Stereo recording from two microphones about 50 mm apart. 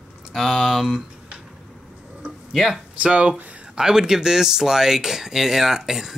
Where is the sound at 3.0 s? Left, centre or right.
Right.